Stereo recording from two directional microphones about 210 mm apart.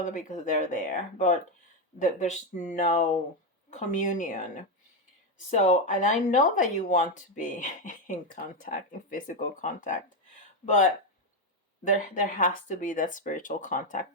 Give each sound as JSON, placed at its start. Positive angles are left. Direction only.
{"t": 0.0, "sound": "speech", "side_deg": 35}
{"t": 11.9, "sound": "speech", "side_deg": 40}